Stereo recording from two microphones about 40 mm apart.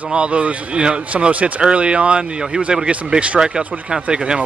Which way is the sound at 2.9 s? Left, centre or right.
Right.